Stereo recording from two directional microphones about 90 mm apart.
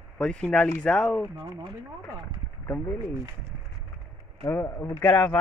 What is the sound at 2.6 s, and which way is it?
Speech, 25° left (ahead or behind).